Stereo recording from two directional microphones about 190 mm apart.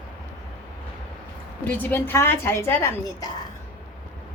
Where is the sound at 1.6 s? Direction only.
10° left (ahead or behind).